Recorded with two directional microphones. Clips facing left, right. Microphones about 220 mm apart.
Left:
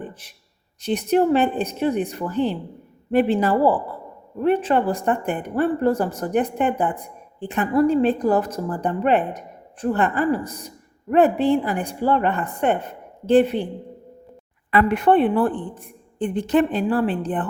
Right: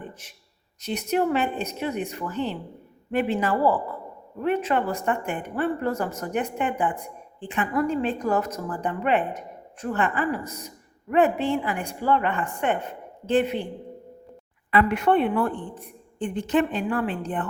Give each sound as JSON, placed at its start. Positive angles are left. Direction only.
{"t": 0.1, "sound": "a man's voice", "side_deg": 35}
{"t": 14.7, "sound": "a woman's voice", "side_deg": 40}